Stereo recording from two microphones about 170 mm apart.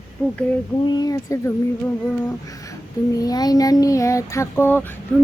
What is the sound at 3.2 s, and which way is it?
Child singing, 20° left (ahead or behind).